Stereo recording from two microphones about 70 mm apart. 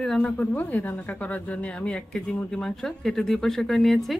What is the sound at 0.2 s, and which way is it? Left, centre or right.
Speech, left.